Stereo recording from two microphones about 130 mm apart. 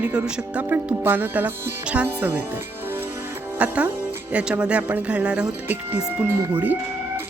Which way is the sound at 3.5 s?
10° right (ahead or behind).